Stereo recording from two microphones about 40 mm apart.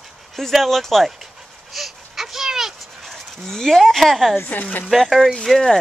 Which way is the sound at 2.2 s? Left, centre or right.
Centre.